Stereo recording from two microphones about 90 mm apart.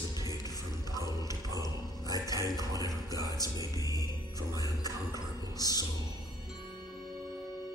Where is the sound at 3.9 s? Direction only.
45° left (ahead or behind).